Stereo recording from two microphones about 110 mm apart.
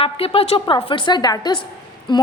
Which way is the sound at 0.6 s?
50° left (ahead or behind).